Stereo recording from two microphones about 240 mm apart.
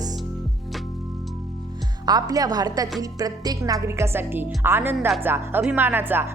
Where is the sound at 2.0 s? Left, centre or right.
Centre.